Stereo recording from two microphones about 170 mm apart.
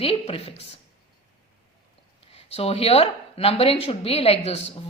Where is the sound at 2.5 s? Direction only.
35° left (ahead or behind).